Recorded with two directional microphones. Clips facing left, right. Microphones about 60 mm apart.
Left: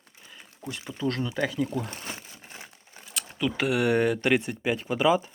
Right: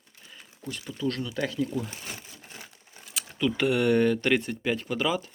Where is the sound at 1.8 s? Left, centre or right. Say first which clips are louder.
Left 1 dB; left.